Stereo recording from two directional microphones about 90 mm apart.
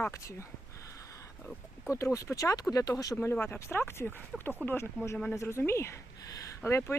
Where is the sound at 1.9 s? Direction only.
35° left (ahead or behind).